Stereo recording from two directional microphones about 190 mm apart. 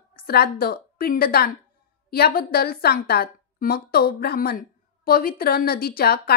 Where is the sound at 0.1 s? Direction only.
55° left (ahead or behind).